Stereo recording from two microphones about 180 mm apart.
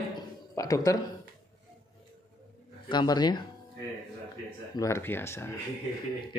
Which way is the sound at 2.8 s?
25° left (ahead or behind).